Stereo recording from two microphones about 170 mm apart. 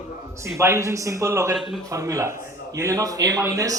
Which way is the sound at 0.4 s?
15° right (ahead or behind).